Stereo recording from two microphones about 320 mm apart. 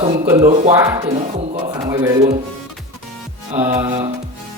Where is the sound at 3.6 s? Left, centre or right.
Centre.